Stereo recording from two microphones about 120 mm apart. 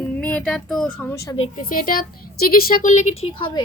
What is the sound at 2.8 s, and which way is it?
Speech, 85° left.